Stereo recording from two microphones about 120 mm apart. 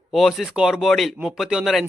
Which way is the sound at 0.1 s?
Centre (ahead or behind).